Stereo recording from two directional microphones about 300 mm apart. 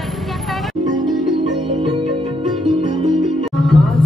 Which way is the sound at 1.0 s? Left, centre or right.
Centre.